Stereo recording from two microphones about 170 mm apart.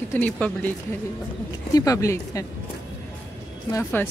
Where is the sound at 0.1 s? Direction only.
10° left (ahead or behind).